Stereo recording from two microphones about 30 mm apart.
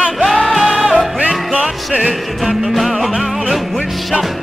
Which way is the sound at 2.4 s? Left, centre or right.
Centre.